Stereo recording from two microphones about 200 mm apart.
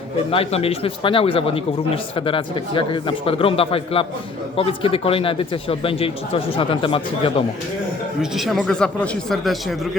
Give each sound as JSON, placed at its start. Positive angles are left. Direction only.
{"t": 0.3, "sound": "a man's voice", "side_deg": 30}
{"t": 8.2, "sound": "speech", "side_deg": 0}